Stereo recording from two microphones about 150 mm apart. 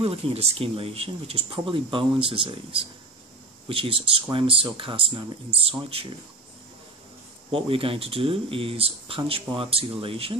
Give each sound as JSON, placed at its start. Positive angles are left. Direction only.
{"t": 0.0, "sound": "speech", "side_deg": -40}
{"t": 7.5, "sound": "speech", "side_deg": -35}